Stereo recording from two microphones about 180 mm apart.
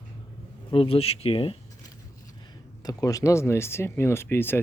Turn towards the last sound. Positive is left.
turn(degrees=10)  # may be behind; listen again after turning